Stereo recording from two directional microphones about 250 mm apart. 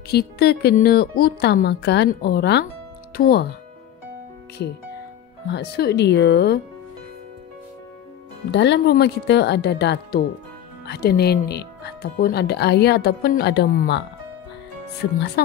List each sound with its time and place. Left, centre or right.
0.1 s speech: left
5.5 s speech: left
8.5 s speech: left
15.4 s speech: left